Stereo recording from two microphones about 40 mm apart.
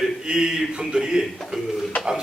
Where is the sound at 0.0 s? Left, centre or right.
Centre.